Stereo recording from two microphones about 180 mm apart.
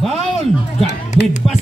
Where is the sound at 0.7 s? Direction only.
40° left (ahead or behind).